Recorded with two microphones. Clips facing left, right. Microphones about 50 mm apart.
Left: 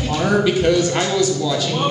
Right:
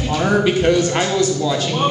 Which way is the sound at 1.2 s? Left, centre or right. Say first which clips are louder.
Right 1 dB; right.